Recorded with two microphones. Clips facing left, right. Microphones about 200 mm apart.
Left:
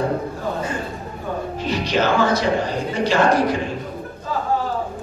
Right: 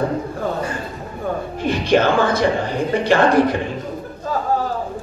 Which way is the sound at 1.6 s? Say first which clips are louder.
Right 5 dB; 55° right (ahead or behind).